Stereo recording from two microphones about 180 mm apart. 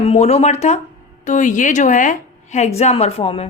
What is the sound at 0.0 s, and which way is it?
A woman's voice, 35° left (ahead or behind).